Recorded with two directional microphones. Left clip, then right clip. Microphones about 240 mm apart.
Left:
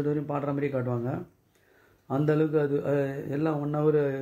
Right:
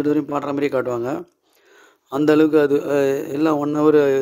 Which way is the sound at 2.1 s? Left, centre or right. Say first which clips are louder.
Right 10 dB; right.